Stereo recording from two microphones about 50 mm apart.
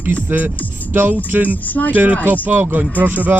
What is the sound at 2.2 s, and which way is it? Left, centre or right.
Speech, right.